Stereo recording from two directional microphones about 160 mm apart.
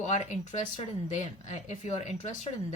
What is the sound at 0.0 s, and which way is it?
Speech, 45° left (ahead or behind).